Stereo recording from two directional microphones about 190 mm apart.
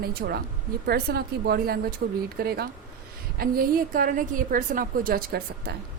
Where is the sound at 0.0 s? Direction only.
55° right (ahead or behind).